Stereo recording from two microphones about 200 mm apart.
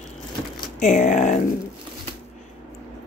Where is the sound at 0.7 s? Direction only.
35° left (ahead or behind).